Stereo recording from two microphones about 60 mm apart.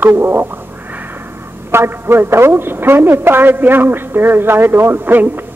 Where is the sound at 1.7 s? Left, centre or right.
Right.